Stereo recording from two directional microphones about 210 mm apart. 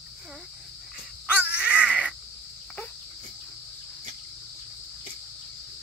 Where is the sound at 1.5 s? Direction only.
10° left (ahead or behind).